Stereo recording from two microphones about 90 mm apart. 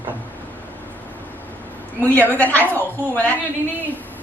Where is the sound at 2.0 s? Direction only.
20° left (ahead or behind).